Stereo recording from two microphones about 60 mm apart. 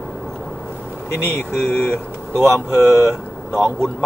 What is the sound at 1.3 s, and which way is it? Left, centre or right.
Speech, left.